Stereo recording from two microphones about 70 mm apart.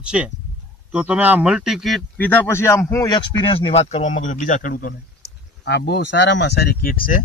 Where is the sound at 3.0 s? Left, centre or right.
Left.